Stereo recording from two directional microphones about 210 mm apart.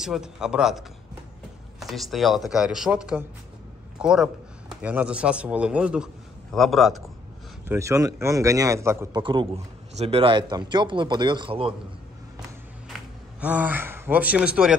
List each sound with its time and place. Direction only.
0.0 s a man's voice: 5° right (ahead or behind)
7.6 s a man's voice: 10° right (ahead or behind)
12.8 s speech: 5° right (ahead or behind)